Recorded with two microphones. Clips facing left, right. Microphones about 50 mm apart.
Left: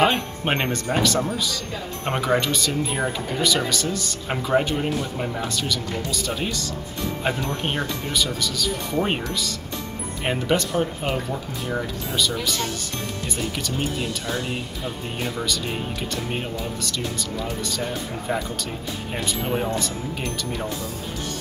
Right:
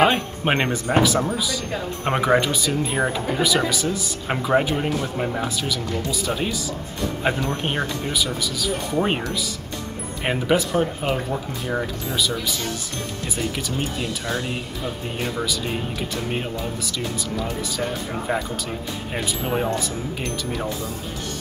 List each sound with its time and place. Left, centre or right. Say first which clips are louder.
0.0 s speech: right 2 dB; centre
19.1 s speech: right 1 dB; centre